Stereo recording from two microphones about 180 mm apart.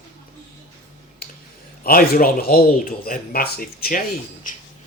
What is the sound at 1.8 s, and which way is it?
Speech, 55° left (ahead or behind).